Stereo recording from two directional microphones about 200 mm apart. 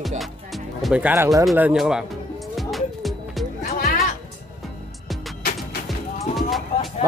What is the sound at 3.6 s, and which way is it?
Music, 45° left (ahead or behind).